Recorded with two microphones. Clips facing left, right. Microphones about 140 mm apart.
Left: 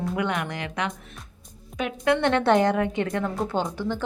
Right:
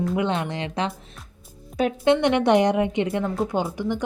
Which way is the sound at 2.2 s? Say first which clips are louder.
Right 2 dB; 15° right (ahead or behind).